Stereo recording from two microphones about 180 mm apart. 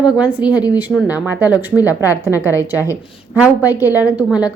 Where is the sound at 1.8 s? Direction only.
15° left (ahead or behind).